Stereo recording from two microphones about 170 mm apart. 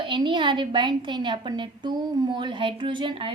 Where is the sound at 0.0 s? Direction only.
30° right (ahead or behind).